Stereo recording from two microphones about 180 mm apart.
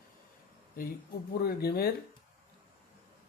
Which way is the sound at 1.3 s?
60° left (ahead or behind).